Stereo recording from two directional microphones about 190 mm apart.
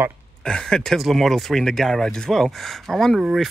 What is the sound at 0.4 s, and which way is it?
Speech, 5° left (ahead or behind).